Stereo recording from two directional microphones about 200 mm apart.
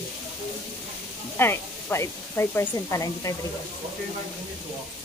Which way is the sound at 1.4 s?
10° left (ahead or behind).